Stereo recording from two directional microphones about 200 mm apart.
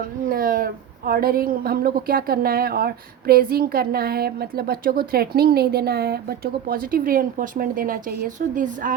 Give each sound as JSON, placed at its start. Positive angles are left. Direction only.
{"t": 0.3, "sound": "a woman's voice", "side_deg": -45}